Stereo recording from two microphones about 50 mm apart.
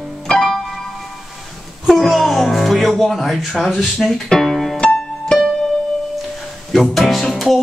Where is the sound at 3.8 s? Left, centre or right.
Centre.